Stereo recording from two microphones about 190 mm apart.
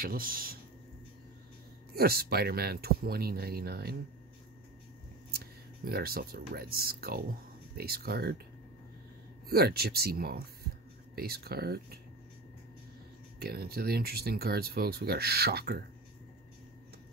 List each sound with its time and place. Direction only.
0.0 s speech: 50° right (ahead or behind)
2.0 s speech: 55° right (ahead or behind)
5.9 s speech: 50° right (ahead or behind)
9.5 s speech: 55° right (ahead or behind)
13.4 s speech: 55° right (ahead or behind)